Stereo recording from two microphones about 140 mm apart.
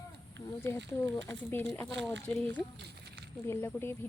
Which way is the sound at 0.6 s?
15° left (ahead or behind).